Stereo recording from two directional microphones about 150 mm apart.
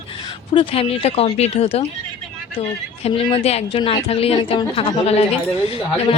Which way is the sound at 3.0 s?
40° left (ahead or behind).